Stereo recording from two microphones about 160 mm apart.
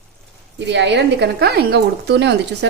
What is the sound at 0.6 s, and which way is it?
Speech, 90° right.